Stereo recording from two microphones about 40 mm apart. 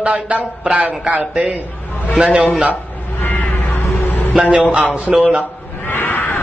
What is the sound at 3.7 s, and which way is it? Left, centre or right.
Music, left.